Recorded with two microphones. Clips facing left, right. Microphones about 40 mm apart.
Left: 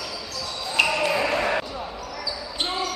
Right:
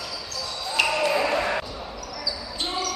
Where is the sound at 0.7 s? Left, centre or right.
Centre.